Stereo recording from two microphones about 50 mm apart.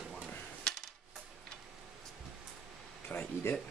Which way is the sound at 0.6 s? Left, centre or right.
Centre.